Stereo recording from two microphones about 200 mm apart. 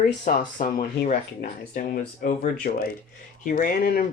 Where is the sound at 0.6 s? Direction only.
45° left (ahead or behind).